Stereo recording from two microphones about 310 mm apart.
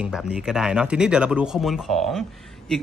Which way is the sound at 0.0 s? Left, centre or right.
Centre.